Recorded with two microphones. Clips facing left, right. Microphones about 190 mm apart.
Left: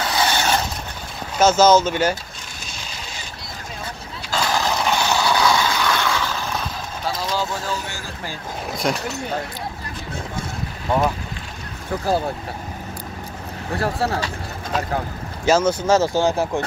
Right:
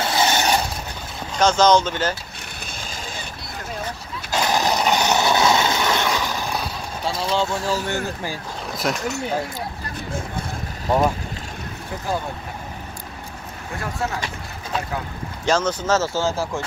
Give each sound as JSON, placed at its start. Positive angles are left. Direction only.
{"t": 0.0, "sound": "a sound", "side_deg": -25}
{"t": 1.4, "sound": "speech", "side_deg": 5}
{"t": 4.4, "sound": "a sound", "side_deg": -20}
{"t": 7.1, "sound": "speech", "side_deg": 0}
{"t": 7.3, "sound": "speech", "side_deg": -25}
{"t": 8.8, "sound": "speech", "side_deg": 0}
{"t": 13.7, "sound": "speech", "side_deg": 35}
{"t": 15.4, "sound": "speech", "side_deg": 10}